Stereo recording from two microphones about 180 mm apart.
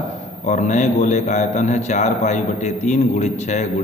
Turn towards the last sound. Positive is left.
turn(degrees=40)  # may be behind; listen again after turning